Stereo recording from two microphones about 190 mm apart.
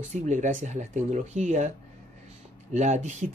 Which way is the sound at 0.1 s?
40° right (ahead or behind).